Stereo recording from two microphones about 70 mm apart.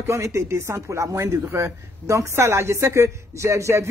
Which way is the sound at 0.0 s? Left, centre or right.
Right.